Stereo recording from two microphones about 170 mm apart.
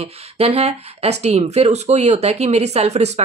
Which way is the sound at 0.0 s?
40° right (ahead or behind).